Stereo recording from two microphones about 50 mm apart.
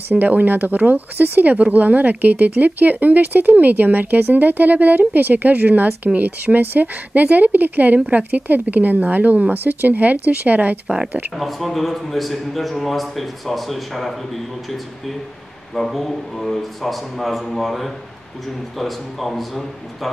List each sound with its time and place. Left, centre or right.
0.1 s speech: right
11.3 s a man's voice: centre